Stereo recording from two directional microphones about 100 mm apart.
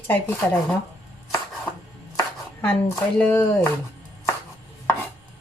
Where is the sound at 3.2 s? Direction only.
20° left (ahead or behind).